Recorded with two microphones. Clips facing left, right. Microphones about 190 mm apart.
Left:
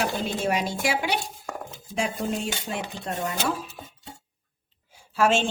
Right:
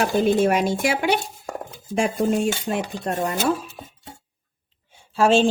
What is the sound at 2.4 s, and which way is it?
Speech, 50° right (ahead or behind).